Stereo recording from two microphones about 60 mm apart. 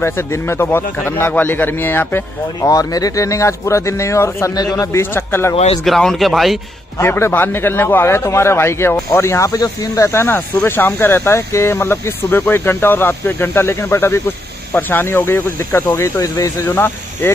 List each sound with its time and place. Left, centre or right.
0.0 s speech: left
2.6 s speech: left
4.7 s a man's voice: left
5.9 s a man's voice: centre
7.0 s a man's voice: left
9.5 s speech: left
10.1 s speech: left
16.0 s speech: left
16.6 s speech: left